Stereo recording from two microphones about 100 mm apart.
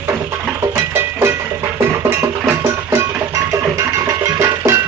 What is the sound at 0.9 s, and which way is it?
Music, 25° right (ahead or behind).